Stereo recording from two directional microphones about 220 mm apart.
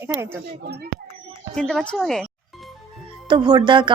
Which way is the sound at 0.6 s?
45° right (ahead or behind).